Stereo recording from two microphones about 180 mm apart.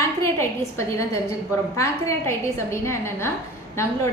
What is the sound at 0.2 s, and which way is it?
A woman's voice, 15° left (ahead or behind).